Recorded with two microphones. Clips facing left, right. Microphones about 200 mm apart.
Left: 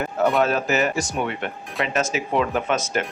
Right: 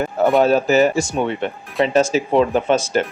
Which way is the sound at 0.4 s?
30° right (ahead or behind).